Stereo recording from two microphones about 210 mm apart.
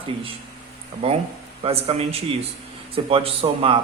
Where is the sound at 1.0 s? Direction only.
25° right (ahead or behind).